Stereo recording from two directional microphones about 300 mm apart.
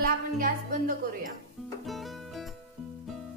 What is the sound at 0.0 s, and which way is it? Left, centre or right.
Speech, right.